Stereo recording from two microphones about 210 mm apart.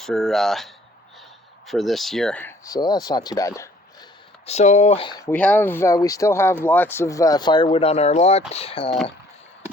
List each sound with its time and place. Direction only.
0.0 s speech: centre (ahead or behind)
4.4 s speech: 35° left (ahead or behind)
5.3 s speech: 5° left (ahead or behind); by 9.0 s 25° left (ahead or behind)